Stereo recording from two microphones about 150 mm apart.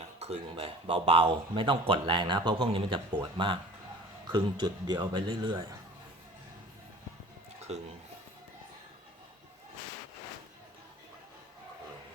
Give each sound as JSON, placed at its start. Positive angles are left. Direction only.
{"t": 0.0, "sound": "a man's voice", "side_deg": -45}